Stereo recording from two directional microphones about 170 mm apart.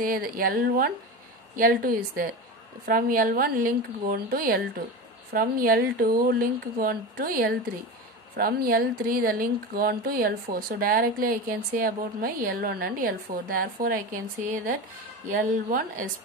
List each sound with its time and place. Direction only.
0.0 s speech: 60° right (ahead or behind)
15.2 s speech: 50° right (ahead or behind)